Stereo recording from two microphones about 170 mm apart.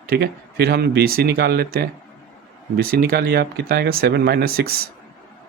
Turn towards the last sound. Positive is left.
turn(degrees=-65)  # may be behind; listen again after turning